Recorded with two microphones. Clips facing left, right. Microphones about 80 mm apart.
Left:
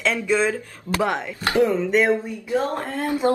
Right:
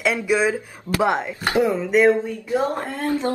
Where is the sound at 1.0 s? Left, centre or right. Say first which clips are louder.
Right 3 dB; right.